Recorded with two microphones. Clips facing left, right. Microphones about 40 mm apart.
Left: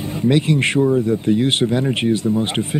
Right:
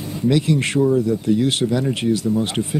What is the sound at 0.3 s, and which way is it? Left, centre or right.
Speech, left.